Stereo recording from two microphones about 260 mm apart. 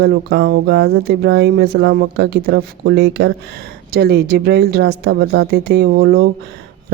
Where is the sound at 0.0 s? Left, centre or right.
Right.